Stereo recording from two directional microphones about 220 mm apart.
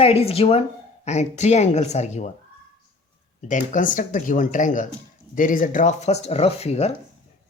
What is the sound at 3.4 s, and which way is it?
Speech, 35° left (ahead or behind).